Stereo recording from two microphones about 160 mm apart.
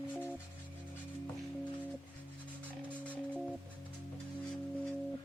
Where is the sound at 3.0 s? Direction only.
10° left (ahead or behind).